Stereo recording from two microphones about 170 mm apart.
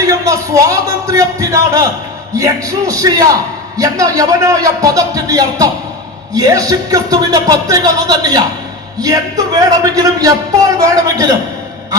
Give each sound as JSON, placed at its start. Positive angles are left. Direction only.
{"t": 0.0, "sound": "speech", "side_deg": -20}